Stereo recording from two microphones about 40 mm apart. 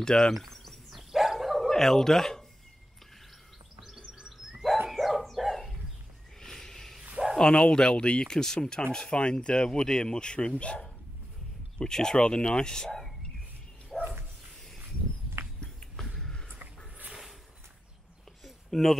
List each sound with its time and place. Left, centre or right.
0.0 s speech: centre
0.3 s a sound: centre
0.9 s dog: centre
1.7 s speech: centre
3.8 s music: centre
4.9 s dog: centre
6.4 s a sound: centre
7.2 s bow-wow: right
7.5 s speech: left
11.8 s speech: centre
13.9 s bow-wow: centre
18.4 s a sound: centre